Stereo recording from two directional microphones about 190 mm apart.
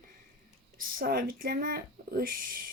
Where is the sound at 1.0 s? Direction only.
50° right (ahead or behind).